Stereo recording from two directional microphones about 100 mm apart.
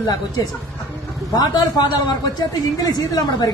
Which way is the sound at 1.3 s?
45° left (ahead or behind).